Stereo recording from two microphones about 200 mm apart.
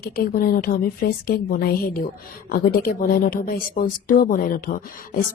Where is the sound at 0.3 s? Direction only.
45° left (ahead or behind).